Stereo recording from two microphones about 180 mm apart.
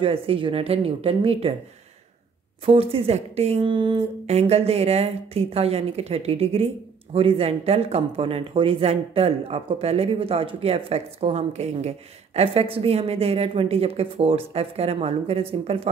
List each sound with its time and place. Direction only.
0.0 s a woman's voice: 30° right (ahead or behind)
2.6 s a woman's voice: 30° right (ahead or behind)